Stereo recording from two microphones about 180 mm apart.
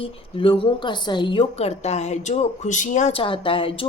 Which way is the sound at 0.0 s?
30° left (ahead or behind).